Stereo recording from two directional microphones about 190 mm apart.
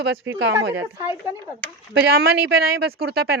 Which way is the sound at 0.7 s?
10° right (ahead or behind).